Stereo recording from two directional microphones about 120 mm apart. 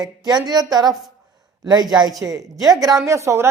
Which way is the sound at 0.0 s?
35° right (ahead or behind).